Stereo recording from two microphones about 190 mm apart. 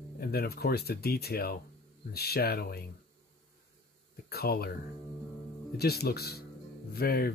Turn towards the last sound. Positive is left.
turn(degrees=55)  # may be behind; listen again after turning